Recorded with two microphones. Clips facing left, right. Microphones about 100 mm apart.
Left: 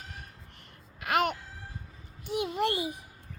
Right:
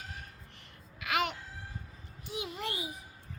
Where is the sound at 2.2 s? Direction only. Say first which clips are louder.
Left 9 dB; 60° left (ahead or behind).